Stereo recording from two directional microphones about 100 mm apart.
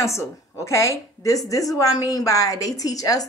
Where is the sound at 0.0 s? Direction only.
30° left (ahead or behind).